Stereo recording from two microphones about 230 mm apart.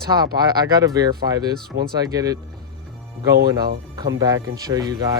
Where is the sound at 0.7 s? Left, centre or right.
Centre.